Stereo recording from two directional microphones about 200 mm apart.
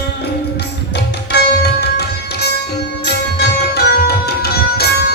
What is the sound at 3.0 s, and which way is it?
Music, 55° left (ahead or behind).